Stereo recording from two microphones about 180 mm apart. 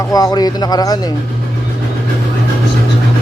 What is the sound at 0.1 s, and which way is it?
Speech, 20° left (ahead or behind).